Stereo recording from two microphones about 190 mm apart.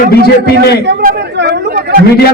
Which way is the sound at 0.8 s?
60° right (ahead or behind).